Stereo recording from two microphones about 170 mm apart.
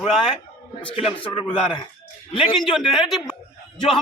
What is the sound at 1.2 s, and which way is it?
Speech, 5° left (ahead or behind).